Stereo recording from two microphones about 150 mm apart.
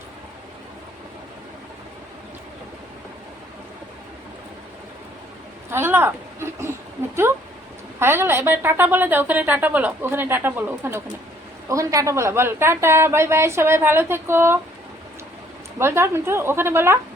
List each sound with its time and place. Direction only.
5.7 s speech: 15° right (ahead or behind)
7.9 s a woman's voice: 15° right (ahead or behind)
15.8 s a woman's voice: 15° right (ahead or behind)